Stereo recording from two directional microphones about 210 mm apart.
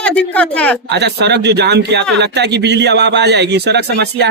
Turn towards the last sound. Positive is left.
turn(degrees=-50)  # may be behind; listen again after turning